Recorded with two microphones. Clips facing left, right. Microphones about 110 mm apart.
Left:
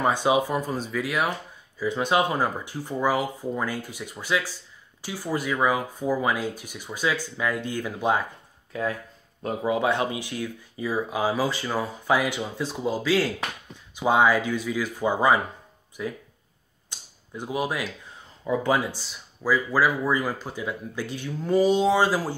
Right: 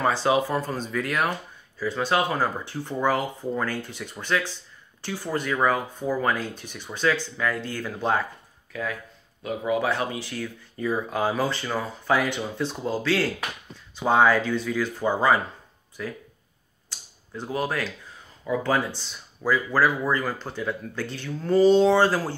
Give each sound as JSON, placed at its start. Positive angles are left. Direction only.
{"t": 0.0, "sound": "speech", "side_deg": 15}
{"t": 1.8, "sound": "speech", "side_deg": 15}
{"t": 8.7, "sound": "speech", "side_deg": 30}
{"t": 16.9, "sound": "a sound", "side_deg": 20}
{"t": 17.3, "sound": "speech", "side_deg": 15}